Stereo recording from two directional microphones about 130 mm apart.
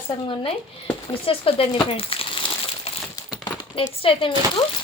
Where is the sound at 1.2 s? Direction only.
45° left (ahead or behind).